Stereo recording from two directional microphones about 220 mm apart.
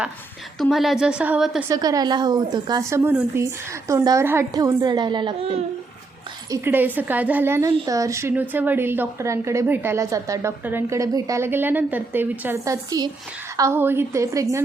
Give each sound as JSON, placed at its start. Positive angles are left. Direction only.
{"t": 0.6, "sound": "a woman's voice", "side_deg": 0}
{"t": 1.7, "sound": "a woman's voice", "side_deg": -15}
{"t": 6.5, "sound": "a woman's voice", "side_deg": -10}